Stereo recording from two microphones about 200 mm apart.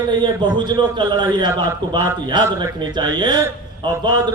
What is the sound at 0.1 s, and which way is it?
A man's voice, 20° right (ahead or behind).